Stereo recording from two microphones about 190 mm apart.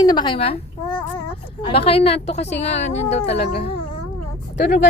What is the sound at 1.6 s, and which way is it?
Speech, 30° left (ahead or behind).